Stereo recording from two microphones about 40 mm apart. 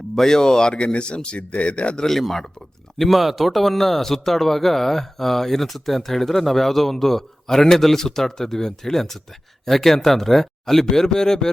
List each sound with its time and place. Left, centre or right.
0.2 s a man's voice: centre
2.0 s speech: centre